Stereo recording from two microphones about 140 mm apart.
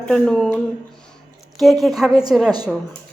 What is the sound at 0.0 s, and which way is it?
Speech, 5° left (ahead or behind).